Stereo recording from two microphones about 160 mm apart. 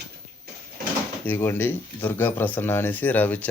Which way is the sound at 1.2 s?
15° left (ahead or behind).